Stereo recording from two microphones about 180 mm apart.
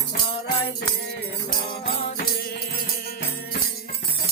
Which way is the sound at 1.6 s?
55° left (ahead or behind).